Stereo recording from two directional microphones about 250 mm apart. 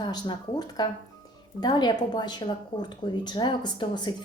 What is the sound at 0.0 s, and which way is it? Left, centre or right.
A woman's voice, centre.